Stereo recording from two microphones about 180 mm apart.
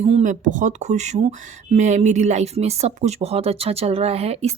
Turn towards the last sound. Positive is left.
turn(degrees=-35)  # may be behind; listen again after turning